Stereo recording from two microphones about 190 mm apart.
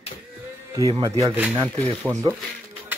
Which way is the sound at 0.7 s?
20° right (ahead or behind).